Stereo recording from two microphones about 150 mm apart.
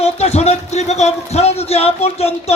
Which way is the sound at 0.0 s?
45° left (ahead or behind).